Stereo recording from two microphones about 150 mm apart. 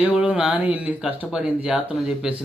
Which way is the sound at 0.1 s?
5° right (ahead or behind).